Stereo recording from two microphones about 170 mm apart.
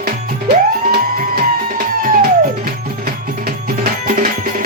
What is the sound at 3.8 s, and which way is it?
Music, 50° right (ahead or behind).